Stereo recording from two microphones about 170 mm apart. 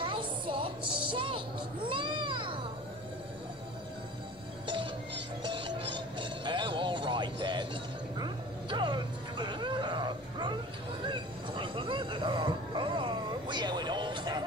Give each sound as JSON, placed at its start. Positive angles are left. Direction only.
{"t": 0.0, "sound": "music", "side_deg": -30}
{"t": 5.4, "sound": "music", "side_deg": -30}
{"t": 11.1, "sound": "a sound", "side_deg": -25}